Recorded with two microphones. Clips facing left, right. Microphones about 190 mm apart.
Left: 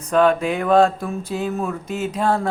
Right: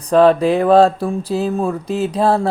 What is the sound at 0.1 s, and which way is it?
Speech, 35° right (ahead or behind).